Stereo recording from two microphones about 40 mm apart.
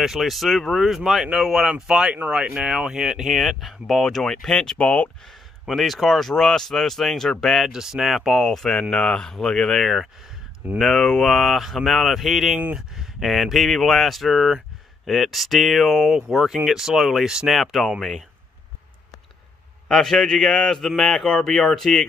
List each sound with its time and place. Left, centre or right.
0.0 s speech: centre
1.7 s speech: right
3.3 s speech: centre
4.0 s speech: centre
4.7 s speech: left
5.7 s speech: centre
7.7 s speech: centre
8.0 s speech: centre
8.5 s speech: centre
19.9 s speech: centre